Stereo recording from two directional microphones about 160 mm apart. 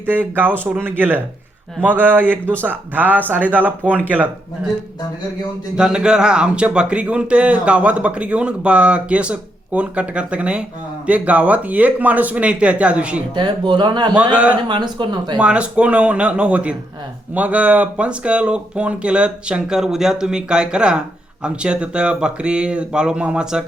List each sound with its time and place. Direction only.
0.0 s speech: 10° right (ahead or behind)
5.7 s speech: 5° right (ahead or behind)
13.3 s speech: 30° right (ahead or behind)
14.3 s speech: 10° right (ahead or behind)
14.7 s speech: 30° right (ahead or behind)
15.4 s speech: 5° right (ahead or behind)